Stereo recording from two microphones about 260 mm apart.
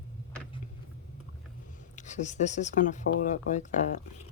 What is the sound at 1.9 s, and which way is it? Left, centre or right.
Speech, left.